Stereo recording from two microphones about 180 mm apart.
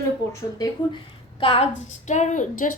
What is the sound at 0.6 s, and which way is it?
A woman's voice, 30° left (ahead or behind).